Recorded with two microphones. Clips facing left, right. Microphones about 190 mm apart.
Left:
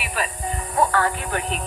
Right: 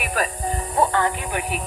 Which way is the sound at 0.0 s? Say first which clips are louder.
Right 3 dB; 45° right (ahead or behind).